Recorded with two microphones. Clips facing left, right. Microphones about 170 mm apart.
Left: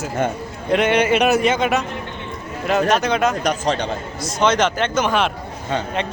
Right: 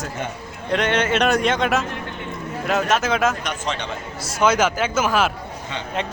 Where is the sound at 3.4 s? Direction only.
40° left (ahead or behind).